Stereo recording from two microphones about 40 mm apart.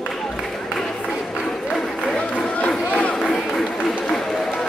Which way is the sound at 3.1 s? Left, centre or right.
Centre.